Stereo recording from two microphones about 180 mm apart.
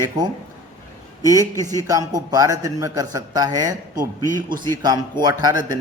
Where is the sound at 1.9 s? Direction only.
20° right (ahead or behind).